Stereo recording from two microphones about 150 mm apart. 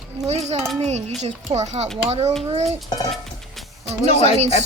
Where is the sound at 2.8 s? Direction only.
25° left (ahead or behind).